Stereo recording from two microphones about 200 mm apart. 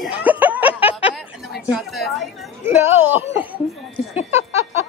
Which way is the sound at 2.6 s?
10° right (ahead or behind).